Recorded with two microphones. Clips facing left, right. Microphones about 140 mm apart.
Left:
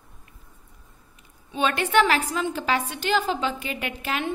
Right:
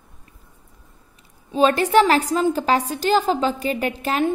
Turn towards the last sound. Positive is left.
turn(degrees=-40)  # may be behind; listen again after turning